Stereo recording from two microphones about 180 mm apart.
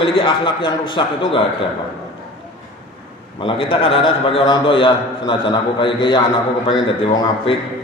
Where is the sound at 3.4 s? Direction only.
30° left (ahead or behind).